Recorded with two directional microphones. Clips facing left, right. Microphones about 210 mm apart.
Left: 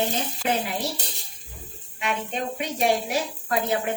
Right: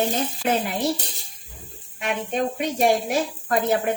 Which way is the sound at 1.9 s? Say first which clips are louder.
Right 4 dB; 50° right (ahead or behind).